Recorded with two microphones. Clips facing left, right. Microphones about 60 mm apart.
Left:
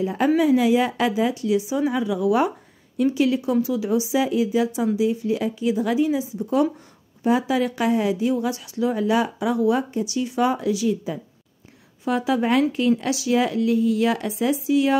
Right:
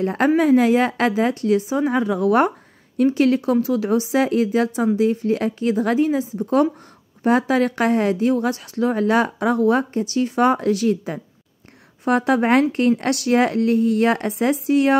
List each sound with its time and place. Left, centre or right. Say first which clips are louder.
0.0 s a woman's voice: right 3 dB; right
0.4 s speech: right 3 dB; right